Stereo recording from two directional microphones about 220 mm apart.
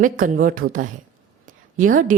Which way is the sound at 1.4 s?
35° right (ahead or behind).